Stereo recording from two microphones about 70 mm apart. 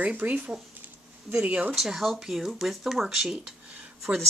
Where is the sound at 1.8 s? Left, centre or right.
Centre.